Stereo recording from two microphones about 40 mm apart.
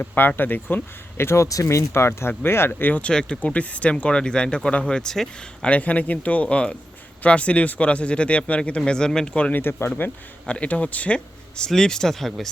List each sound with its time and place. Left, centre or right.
0.2 s speech: left
1.2 s speech: left
3.1 s speech: left
3.4 s speech: left
4.9 s speech: centre
5.6 s speech: left
8.8 s speech: centre
9.5 s speech: left
10.4 s speech: left
11.7 s speech: centre